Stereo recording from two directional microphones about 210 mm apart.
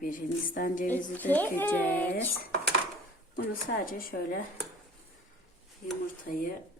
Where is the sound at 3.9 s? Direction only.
45° left (ahead or behind).